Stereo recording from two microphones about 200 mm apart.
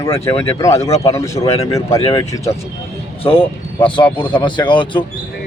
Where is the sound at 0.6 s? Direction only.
15° left (ahead or behind).